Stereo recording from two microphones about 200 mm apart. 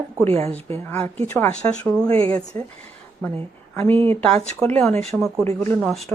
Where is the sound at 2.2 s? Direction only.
25° right (ahead or behind).